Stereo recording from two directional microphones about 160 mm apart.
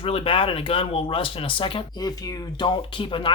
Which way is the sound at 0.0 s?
35° left (ahead or behind).